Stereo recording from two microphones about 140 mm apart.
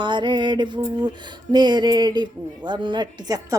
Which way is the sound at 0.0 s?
35° right (ahead or behind).